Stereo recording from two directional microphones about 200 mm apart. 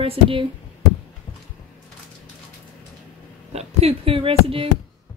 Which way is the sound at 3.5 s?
30° right (ahead or behind).